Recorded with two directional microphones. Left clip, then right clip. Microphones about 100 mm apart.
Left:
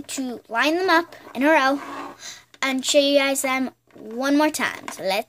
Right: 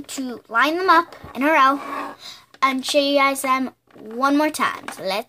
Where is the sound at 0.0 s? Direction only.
20° left (ahead or behind).